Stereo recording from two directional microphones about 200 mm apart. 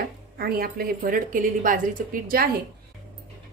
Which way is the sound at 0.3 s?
50° right (ahead or behind).